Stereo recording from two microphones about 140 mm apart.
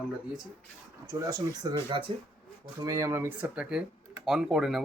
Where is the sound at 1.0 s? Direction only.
25° right (ahead or behind); by 4.8 s 5° right (ahead or behind).